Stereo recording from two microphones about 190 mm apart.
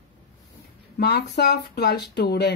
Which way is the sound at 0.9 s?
55° left (ahead or behind).